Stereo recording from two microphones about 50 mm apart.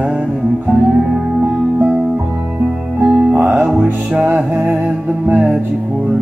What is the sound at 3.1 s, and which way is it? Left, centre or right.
Music, centre.